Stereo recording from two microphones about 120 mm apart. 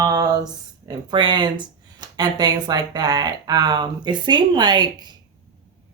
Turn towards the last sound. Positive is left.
turn(degrees=-35)  # may be behind; listen again after turning